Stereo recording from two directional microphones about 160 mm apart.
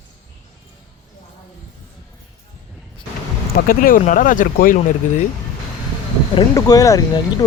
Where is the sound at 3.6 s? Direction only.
60° left (ahead or behind).